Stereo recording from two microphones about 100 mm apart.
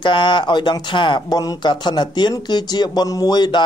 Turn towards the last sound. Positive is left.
turn(degrees=50)  # may be behind; listen again after turning